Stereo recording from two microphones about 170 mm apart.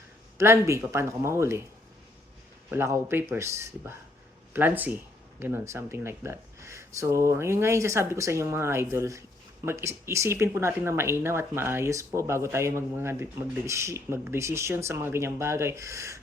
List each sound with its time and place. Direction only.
0.3 s speech: 15° right (ahead or behind)
2.6 s speech: 15° right (ahead or behind)